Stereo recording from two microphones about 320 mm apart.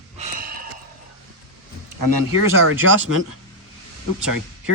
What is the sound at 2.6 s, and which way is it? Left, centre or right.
Speech, right.